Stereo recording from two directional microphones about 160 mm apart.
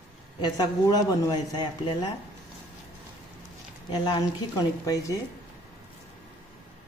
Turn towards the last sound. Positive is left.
turn(degrees=20)  # may be behind; listen again after turning